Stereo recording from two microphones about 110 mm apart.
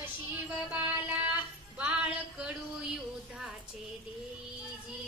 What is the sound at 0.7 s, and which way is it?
Speech, 15° right (ahead or behind).